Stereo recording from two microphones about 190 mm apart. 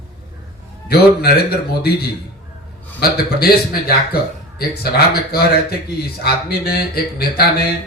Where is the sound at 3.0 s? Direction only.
55° left (ahead or behind).